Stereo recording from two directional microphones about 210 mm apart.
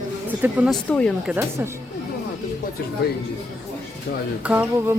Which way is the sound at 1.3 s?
10° right (ahead or behind).